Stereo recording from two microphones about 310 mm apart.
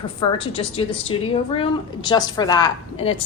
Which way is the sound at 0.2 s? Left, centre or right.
Centre.